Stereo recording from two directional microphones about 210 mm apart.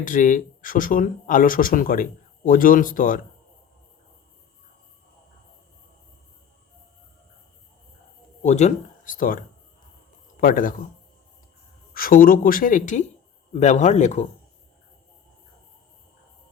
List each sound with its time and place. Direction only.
0.0 s speech: 40° left (ahead or behind)
8.4 s speech: 35° left (ahead or behind)
10.4 s speech: 40° left (ahead or behind)
11.9 s speech: 45° left (ahead or behind)